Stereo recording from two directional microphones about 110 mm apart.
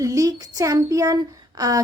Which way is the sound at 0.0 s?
30° right (ahead or behind).